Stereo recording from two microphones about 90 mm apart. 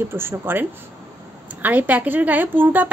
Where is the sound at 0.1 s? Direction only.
25° right (ahead or behind).